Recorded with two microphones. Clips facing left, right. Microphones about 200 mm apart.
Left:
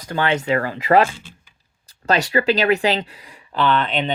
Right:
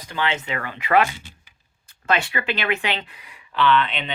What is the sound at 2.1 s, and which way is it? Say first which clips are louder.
Speech: left 6 dB; 35° left (ahead or behind).